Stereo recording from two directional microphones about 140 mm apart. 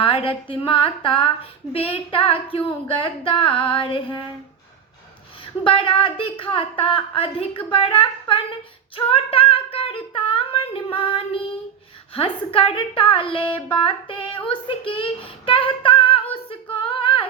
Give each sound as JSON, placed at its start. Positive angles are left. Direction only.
{"t": 0.0, "sound": "a woman's voice", "side_deg": 40}
{"t": 5.6, "sound": "a woman's voice", "side_deg": 40}